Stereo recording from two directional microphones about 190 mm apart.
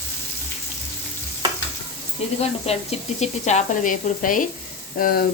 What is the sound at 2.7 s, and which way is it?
Speech, 30° left (ahead or behind).